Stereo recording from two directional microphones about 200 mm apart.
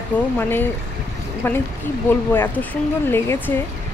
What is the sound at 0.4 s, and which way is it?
Speech, 10° left (ahead or behind).